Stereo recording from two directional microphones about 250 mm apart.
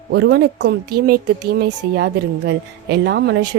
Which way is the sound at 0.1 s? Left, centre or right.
Right.